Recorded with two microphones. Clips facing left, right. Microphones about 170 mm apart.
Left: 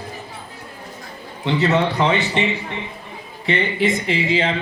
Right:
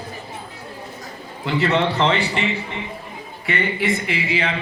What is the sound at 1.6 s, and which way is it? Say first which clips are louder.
Speech: even; centre (ahead or behind).